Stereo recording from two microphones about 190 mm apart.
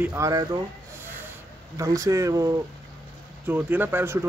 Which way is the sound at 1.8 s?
15° right (ahead or behind).